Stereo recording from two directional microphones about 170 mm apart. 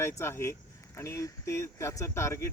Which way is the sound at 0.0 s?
15° left (ahead or behind).